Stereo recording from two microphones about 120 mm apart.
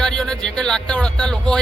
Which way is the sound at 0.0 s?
5° left (ahead or behind).